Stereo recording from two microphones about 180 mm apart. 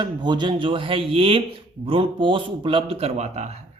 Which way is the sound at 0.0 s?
25° right (ahead or behind).